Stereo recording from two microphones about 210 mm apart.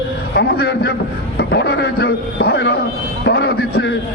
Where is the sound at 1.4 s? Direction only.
50° left (ahead or behind).